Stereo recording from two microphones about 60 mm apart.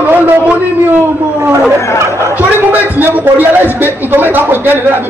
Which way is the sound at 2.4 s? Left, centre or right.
Right.